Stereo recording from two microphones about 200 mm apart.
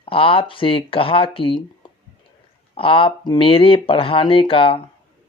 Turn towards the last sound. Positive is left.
turn(degrees=25)  # may be behind; listen again after turning